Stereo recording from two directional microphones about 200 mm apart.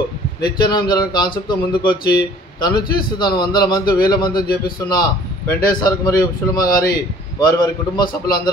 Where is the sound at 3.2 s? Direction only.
20° left (ahead or behind).